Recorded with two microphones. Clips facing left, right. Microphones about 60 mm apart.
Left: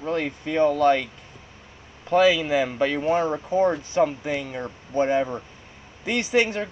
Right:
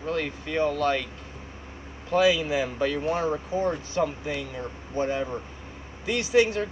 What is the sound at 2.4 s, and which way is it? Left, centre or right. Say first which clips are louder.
Speech: left 4 dB; left.